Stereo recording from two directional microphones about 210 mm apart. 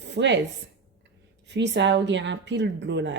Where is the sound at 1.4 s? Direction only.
55° right (ahead or behind).